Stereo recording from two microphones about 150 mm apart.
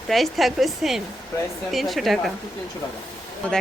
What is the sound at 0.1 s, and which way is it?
Speech, centre (ahead or behind).